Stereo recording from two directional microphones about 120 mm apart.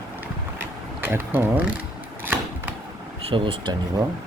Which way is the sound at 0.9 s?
15° right (ahead or behind).